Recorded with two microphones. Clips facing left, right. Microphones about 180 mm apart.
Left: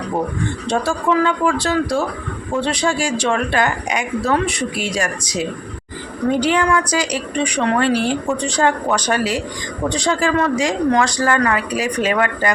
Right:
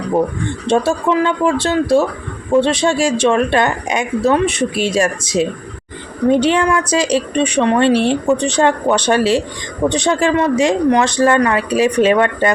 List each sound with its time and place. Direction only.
0.7 s speech: 20° right (ahead or behind)